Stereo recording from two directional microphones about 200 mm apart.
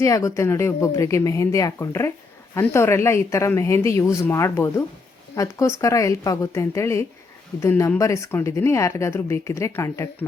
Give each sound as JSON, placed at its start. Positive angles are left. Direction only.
{"t": 0.0, "sound": "speech", "side_deg": 15}